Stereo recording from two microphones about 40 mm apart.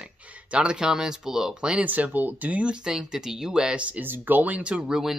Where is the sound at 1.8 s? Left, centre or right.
Right.